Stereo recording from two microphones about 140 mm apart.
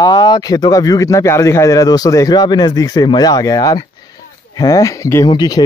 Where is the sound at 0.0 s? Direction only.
30° left (ahead or behind).